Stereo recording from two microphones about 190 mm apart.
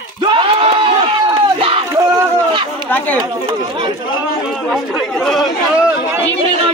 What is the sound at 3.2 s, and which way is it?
Speech, 25° right (ahead or behind).